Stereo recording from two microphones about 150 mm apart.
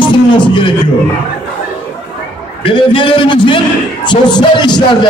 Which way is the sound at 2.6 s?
35° left (ahead or behind).